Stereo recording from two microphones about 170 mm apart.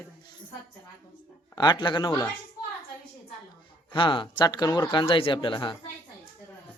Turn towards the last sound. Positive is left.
turn(degrees=30)  # may be behind; listen again after turning